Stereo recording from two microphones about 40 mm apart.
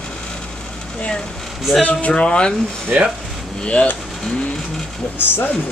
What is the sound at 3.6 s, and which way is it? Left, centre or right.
Speech, left.